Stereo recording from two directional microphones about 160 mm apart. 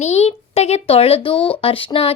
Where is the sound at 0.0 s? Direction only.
45° left (ahead or behind).